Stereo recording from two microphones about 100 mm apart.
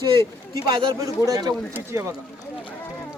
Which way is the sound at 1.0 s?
35° right (ahead or behind).